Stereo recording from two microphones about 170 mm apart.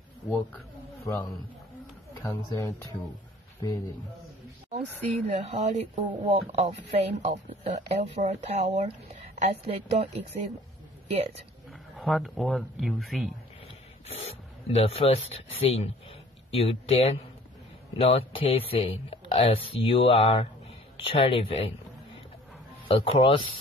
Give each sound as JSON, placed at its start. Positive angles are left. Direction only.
{"t": 1.0, "sound": "a man's voice", "side_deg": 20}
{"t": 4.7, "sound": "speech", "side_deg": -40}
{"t": 12.0, "sound": "speech", "side_deg": 0}
{"t": 14.0, "sound": "speech", "side_deg": 35}